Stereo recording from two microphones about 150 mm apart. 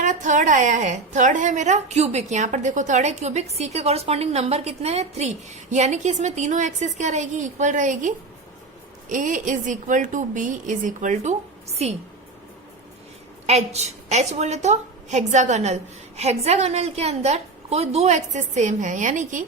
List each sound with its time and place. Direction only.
0.0 s a woman's voice: 55° right (ahead or behind)
13.5 s a woman's voice: 45° right (ahead or behind)